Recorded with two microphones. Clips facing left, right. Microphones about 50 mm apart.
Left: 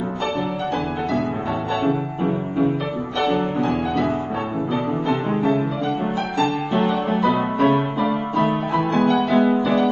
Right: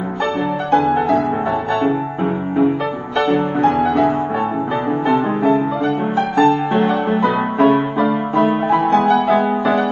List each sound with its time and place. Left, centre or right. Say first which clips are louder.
3.2 s music: right 5 dB; right
5.0 s music: right 7 dB; right